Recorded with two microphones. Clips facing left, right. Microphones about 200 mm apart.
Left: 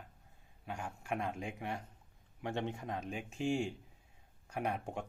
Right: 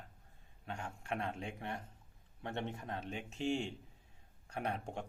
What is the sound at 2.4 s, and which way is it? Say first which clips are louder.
Speech: left 3 dB; 25° left (ahead or behind).